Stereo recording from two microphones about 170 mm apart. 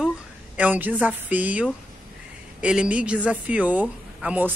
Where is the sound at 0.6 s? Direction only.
10° right (ahead or behind).